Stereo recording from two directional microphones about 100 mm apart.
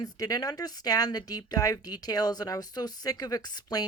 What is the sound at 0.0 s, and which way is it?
A woman's voice, 40° left (ahead or behind).